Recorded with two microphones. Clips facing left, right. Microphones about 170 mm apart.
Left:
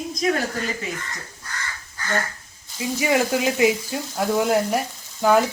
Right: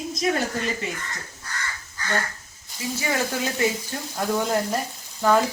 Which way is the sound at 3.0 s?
15° left (ahead or behind).